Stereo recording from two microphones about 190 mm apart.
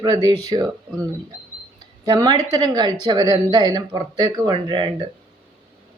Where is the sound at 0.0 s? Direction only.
20° right (ahead or behind).